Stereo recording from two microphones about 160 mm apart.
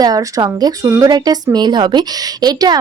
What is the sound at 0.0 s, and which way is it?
A woman's voice, 20° right (ahead or behind).